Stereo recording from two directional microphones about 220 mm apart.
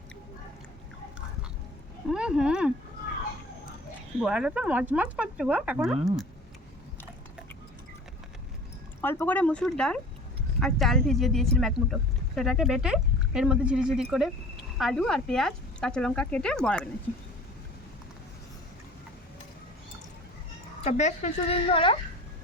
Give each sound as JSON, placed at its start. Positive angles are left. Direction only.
{"t": 2.0, "sound": "speech", "side_deg": -5}
{"t": 4.2, "sound": "speech", "side_deg": -5}
{"t": 9.0, "sound": "speech", "side_deg": 10}
{"t": 20.8, "sound": "speech", "side_deg": 30}